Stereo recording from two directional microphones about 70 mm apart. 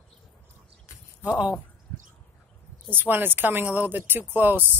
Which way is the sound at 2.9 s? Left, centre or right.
Right.